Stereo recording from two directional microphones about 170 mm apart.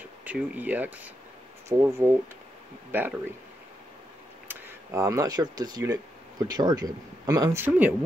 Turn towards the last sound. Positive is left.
turn(degrees=-15)  # may be behind; listen again after turning